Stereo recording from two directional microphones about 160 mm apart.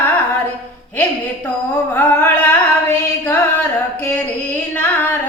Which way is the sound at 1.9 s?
10° left (ahead or behind).